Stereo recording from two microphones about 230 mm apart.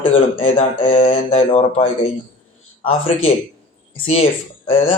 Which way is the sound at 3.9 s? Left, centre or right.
Left.